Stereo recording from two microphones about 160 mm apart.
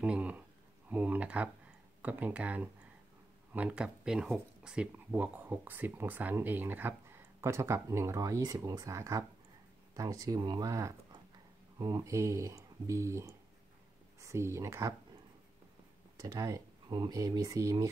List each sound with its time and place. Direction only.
0.0 s speech: 5° right (ahead or behind)
16.2 s speech: 20° right (ahead or behind)